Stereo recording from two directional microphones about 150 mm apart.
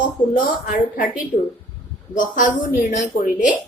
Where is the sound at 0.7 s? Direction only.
65° left (ahead or behind).